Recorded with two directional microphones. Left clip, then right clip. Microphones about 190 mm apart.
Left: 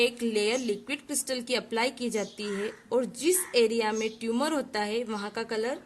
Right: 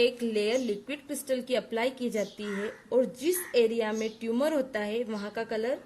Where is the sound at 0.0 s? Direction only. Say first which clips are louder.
Even; 50° left (ahead or behind).